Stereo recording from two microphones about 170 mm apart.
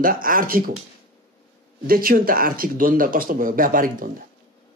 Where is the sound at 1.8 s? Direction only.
60° right (ahead or behind).